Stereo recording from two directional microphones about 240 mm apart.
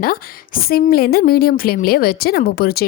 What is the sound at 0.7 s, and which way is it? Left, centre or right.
A woman's voice, left.